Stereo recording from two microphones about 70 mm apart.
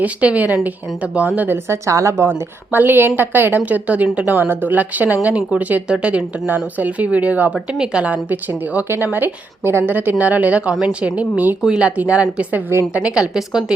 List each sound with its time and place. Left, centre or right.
0.0 s a woman's voice: centre
1.4 s a woman's voice: right
2.7 s a woman's voice: right; by 13.7 s centre